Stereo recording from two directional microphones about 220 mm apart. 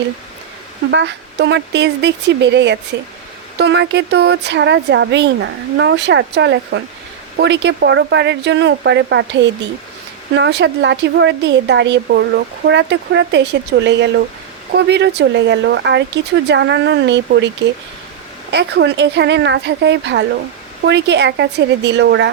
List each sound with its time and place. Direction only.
0.9 s speech: 50° right (ahead or behind)
18.5 s speech: 50° right (ahead or behind)